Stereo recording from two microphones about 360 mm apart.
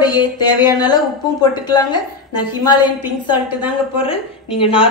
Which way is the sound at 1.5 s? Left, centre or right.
Centre.